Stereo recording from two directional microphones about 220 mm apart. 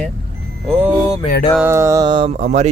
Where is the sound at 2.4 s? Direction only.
30° right (ahead or behind).